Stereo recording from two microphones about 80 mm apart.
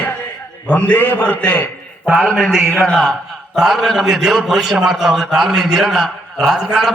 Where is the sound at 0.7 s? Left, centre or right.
Left.